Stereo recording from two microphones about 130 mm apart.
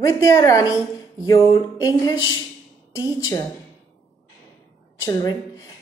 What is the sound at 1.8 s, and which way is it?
A woman's voice, 30° left (ahead or behind).